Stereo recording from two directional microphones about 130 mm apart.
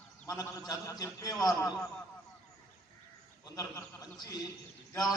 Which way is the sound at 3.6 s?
30° left (ahead or behind).